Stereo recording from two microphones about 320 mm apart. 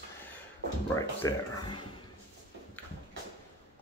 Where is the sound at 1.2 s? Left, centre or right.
Centre.